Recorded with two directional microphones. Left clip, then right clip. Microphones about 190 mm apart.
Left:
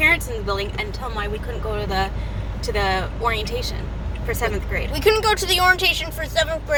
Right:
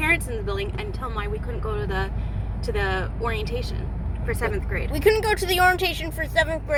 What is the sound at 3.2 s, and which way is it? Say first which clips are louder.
Speech: left 5 dB; 15° left (ahead or behind).